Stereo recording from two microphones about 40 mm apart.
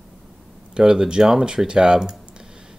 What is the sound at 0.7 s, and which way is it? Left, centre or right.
Speech, centre.